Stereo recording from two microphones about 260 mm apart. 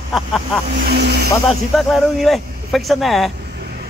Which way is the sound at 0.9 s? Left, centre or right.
Right.